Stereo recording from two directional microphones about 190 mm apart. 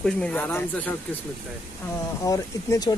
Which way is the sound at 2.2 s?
20° left (ahead or behind).